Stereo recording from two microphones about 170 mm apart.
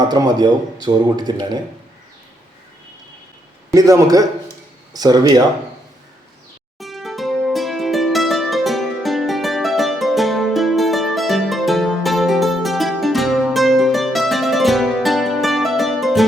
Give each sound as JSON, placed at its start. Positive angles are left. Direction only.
{"t": 0.1, "sound": "a man's voice", "side_deg": -25}
{"t": 3.7, "sound": "a man's voice", "side_deg": -20}
{"t": 6.7, "sound": "music", "side_deg": 0}